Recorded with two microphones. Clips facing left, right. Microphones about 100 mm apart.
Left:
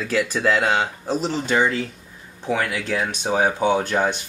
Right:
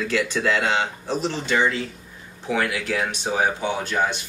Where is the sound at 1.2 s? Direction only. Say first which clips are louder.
Left 2 dB; 40° left (ahead or behind).